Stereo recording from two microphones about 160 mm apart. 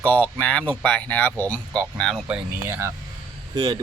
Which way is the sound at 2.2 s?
10° right (ahead or behind).